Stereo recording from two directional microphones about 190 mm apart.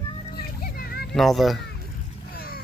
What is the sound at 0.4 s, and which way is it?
Children playing, 55° left (ahead or behind).